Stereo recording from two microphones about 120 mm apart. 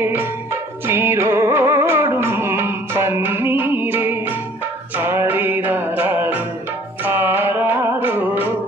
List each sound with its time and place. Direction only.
0.0 s music: 20° right (ahead or behind)